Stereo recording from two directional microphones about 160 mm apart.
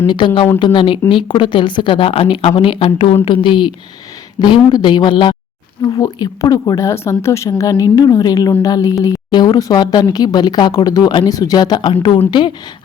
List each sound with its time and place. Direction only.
0.1 s a woman's voice: 30° left (ahead or behind)